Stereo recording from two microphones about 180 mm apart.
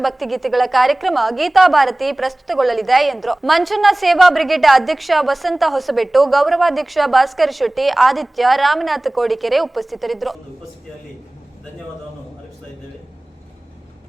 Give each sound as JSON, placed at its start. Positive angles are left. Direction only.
{"t": 0.0, "sound": "a woman's voice", "side_deg": 0}